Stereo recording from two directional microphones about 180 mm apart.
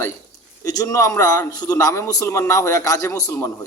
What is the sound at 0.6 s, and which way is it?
A man's voice, 20° left (ahead or behind).